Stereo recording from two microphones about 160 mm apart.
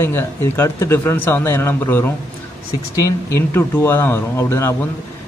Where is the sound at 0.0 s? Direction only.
15° left (ahead or behind).